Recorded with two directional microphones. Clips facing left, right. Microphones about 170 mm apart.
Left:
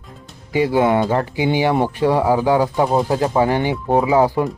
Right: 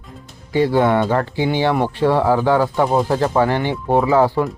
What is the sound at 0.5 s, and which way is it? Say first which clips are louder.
Speech: even; 10° left (ahead or behind).